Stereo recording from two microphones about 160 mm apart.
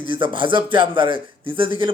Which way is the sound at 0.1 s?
30° right (ahead or behind).